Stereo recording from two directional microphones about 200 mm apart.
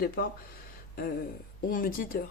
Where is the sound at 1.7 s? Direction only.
45° left (ahead or behind).